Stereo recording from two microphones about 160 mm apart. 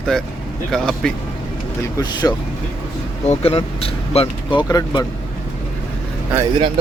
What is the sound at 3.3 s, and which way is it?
Speech, 35° left (ahead or behind).